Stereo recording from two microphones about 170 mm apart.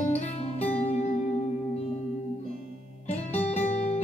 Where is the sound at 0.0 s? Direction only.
40° left (ahead or behind).